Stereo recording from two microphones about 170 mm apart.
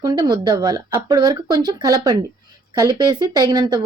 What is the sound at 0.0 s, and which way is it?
A woman's voice, 25° right (ahead or behind).